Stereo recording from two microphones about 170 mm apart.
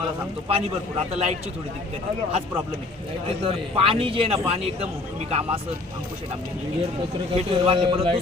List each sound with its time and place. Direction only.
0.4 s speech: 35° right (ahead or behind)
3.4 s speech: 35° right (ahead or behind)
7.3 s speech: 30° right (ahead or behind)